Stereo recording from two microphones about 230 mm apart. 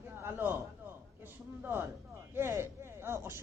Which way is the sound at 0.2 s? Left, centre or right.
Centre.